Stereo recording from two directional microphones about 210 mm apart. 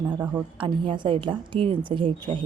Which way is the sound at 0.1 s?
10° right (ahead or behind).